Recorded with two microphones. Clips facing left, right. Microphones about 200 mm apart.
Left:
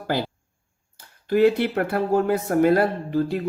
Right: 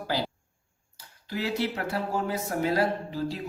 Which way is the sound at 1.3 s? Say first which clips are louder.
Left 11 dB; 55° left (ahead or behind).